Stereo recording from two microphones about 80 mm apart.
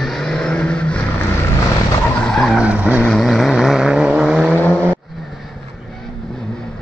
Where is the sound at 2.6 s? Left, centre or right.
Centre.